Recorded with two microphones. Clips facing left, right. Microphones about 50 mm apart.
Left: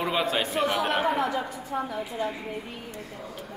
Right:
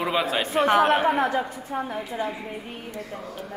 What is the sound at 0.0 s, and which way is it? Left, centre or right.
Speech, centre.